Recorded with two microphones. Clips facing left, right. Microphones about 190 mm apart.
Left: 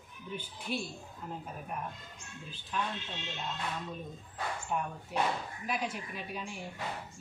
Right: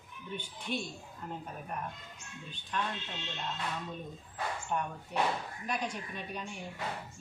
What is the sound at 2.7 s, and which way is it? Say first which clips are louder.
Speech: even; 5° left (ahead or behind).